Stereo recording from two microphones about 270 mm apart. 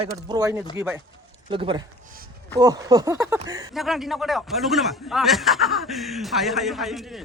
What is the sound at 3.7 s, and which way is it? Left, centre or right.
A man's voice, centre.